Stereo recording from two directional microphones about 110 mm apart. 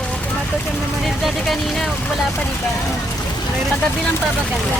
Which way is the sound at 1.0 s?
Centre (ahead or behind).